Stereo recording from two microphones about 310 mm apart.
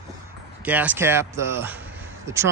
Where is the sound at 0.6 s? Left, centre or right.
Centre.